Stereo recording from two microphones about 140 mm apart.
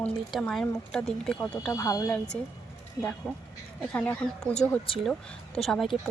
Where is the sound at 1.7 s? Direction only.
25° left (ahead or behind).